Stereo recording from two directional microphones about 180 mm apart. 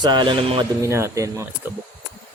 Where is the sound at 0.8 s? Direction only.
15° right (ahead or behind).